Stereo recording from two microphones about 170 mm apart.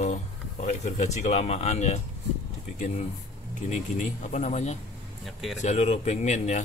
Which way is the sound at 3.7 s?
45° left (ahead or behind).